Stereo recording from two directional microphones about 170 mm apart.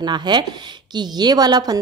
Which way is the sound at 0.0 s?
25° right (ahead or behind).